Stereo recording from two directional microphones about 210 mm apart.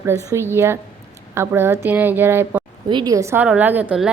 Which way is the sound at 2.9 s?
20° right (ahead or behind).